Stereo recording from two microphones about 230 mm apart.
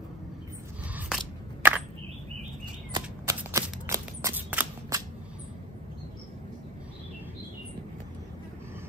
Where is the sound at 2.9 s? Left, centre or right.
Centre.